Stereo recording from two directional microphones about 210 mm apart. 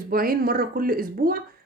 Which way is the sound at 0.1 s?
45° right (ahead or behind).